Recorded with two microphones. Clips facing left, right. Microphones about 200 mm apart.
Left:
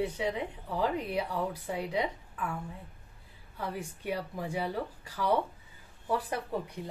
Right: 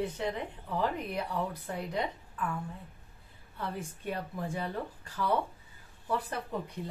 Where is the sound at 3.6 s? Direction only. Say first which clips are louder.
Left 1 dB; 10° left (ahead or behind).